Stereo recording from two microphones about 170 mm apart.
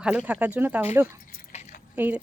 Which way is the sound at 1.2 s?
45° left (ahead or behind).